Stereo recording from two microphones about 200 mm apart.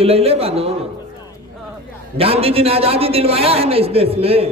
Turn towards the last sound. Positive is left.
turn(degrees=-30)  # may be behind; listen again after turning